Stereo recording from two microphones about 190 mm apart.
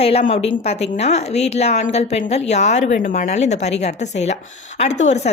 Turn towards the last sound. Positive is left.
turn(degrees=35)  # may be behind; listen again after turning